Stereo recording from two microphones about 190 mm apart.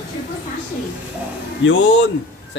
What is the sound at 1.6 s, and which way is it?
Speech, 75° left (ahead or behind).